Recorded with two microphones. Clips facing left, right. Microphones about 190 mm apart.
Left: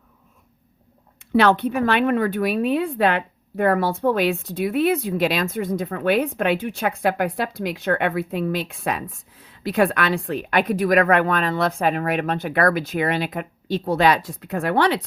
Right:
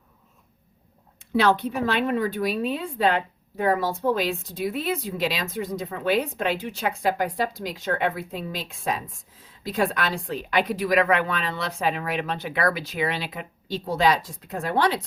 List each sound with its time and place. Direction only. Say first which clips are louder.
1.4 s a woman's voice: left 4 dB; 60° left (ahead or behind)